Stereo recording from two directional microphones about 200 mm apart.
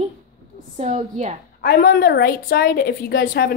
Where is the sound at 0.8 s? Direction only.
35° right (ahead or behind).